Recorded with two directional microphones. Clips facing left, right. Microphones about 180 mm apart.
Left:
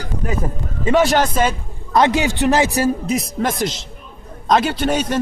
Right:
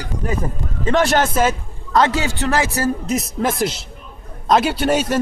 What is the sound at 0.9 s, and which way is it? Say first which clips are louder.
Speech: left 1 dB; 5° left (ahead or behind).